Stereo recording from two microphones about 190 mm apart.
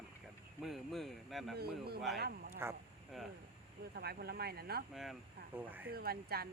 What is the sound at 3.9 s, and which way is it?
Speech, 55° right (ahead or behind).